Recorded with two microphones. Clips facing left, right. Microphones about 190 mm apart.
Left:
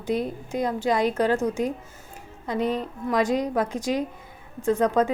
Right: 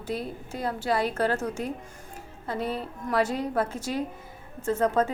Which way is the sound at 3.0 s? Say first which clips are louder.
Left 3 dB; 15° left (ahead or behind).